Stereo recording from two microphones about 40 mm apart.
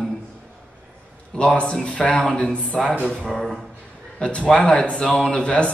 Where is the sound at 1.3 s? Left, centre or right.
Left.